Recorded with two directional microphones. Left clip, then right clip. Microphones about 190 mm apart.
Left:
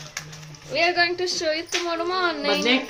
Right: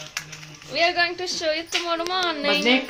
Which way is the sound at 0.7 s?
5° left (ahead or behind).